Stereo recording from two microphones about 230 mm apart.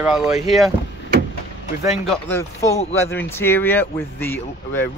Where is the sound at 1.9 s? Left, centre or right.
Centre.